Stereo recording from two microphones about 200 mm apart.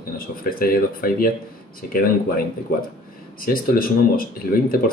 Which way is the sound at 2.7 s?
45° left (ahead or behind).